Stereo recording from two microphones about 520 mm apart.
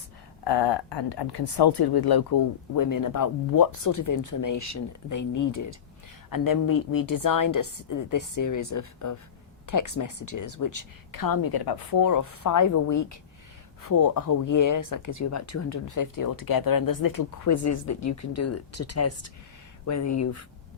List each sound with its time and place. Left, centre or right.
0.4 s speech: left